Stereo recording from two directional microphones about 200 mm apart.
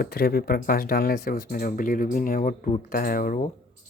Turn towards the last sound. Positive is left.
turn(degrees=45)  # may be behind; listen again after turning